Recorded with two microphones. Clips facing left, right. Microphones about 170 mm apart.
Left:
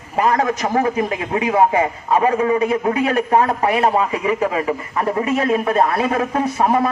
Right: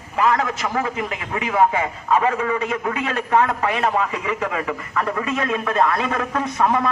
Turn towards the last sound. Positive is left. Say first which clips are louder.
# left 3 dB
turn(degrees=30)  # may be behind; listen again after turning